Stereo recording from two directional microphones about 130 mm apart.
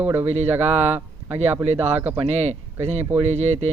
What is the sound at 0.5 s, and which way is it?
Speech, 15° right (ahead or behind).